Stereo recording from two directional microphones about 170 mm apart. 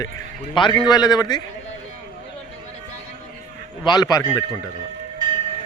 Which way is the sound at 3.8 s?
25° left (ahead or behind).